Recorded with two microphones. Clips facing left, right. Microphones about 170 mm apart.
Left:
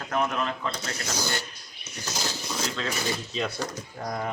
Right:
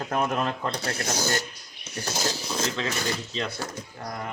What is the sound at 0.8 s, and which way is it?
Speech, 60° right (ahead or behind).